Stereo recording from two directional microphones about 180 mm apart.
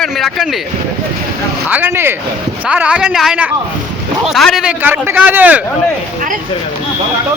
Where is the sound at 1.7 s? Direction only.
10° right (ahead or behind).